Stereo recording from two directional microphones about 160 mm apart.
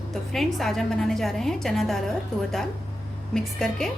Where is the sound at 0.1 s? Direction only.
Centre (ahead or behind).